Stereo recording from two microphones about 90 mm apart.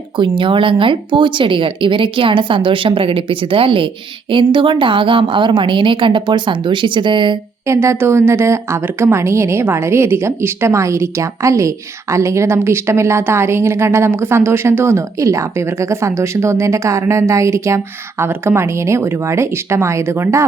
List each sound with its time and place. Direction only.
0.2 s speech: 70° right (ahead or behind)
4.3 s a woman's voice: 70° right (ahead or behind)
7.7 s a woman's voice: 30° right (ahead or behind)